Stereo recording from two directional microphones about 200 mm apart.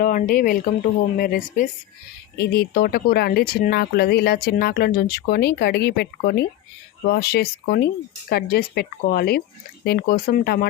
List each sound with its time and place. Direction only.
0.0 s speech: 45° left (ahead or behind)